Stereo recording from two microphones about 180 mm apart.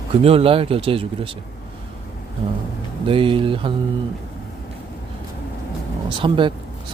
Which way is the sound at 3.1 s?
30° right (ahead or behind).